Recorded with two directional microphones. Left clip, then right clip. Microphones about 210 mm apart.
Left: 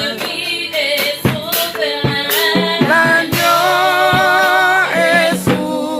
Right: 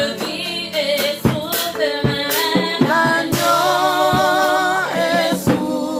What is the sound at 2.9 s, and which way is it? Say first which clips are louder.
Music: left 5 dB; 15° left (ahead or behind).